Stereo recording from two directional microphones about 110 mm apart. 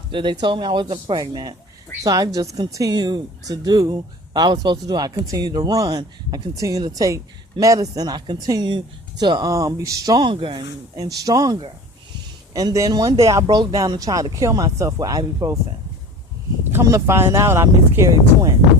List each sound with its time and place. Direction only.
0.1 s a man's voice: 45° right (ahead or behind)
10.3 s speech: 50° right (ahead or behind); by 15.6 s 30° right (ahead or behind)
16.7 s speech: 25° right (ahead or behind)